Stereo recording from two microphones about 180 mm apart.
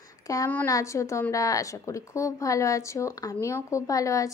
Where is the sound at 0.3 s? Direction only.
15° left (ahead or behind).